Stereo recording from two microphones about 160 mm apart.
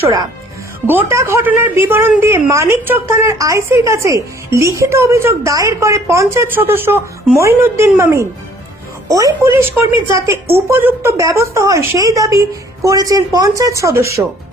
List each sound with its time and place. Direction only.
0.9 s a woman's voice: 15° right (ahead or behind)